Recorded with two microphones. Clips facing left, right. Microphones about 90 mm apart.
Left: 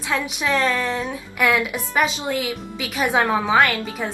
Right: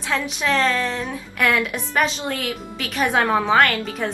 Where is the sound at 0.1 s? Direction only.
10° left (ahead or behind).